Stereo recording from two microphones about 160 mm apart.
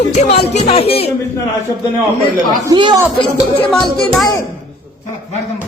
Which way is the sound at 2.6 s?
25° right (ahead or behind).